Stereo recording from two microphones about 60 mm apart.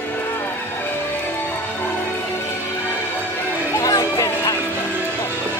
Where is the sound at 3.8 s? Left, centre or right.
Left.